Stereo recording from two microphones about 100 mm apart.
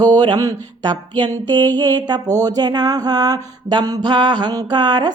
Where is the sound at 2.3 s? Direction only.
40° right (ahead or behind).